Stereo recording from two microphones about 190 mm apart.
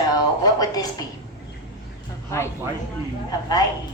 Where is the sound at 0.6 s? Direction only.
20° left (ahead or behind).